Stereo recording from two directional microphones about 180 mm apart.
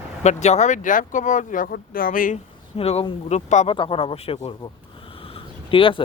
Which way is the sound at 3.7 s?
30° left (ahead or behind).